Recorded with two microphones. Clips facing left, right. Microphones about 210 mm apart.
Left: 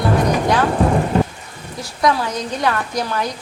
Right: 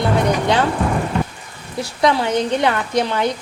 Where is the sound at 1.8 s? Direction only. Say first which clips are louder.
Right 1 dB; 25° right (ahead or behind).